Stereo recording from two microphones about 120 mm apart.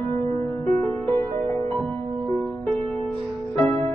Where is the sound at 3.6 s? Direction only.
10° left (ahead or behind).